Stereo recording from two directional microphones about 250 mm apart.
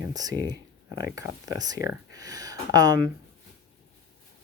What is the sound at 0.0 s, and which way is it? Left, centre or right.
Speech, centre.